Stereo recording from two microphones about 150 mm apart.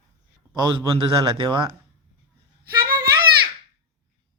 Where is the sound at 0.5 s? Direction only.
25° right (ahead or behind).